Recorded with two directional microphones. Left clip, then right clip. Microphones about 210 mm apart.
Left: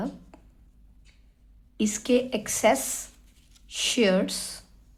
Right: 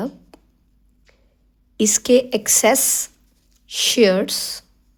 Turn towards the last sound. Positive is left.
turn(degrees=-35)  # may be behind; listen again after turning